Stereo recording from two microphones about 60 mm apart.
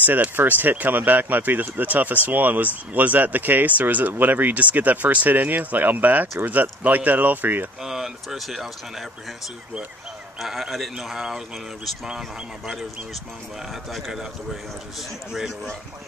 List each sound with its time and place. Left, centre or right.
0.0 s speech: right
7.8 s speech: centre
10.4 s speech: centre
13.9 s speech: centre